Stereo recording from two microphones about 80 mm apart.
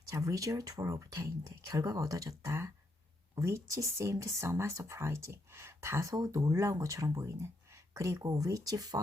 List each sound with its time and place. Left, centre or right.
0.1 s speech: right
2.4 s speech: right
3.3 s speech: right
6.1 s speech: right